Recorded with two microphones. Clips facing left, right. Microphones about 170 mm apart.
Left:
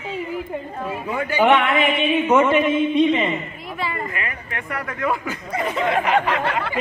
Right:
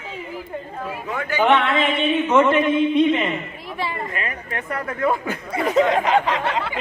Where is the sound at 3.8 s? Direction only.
30° right (ahead or behind).